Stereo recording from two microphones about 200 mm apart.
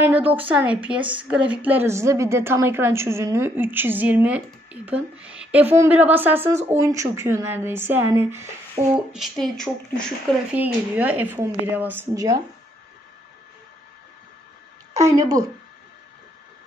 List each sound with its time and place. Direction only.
0.0 s a woman's voice: 10° right (ahead or behind)
8.9 s speech: centre (ahead or behind)
10.5 s a woman's voice: 10° right (ahead or behind)
15.0 s a woman's voice: 15° right (ahead or behind)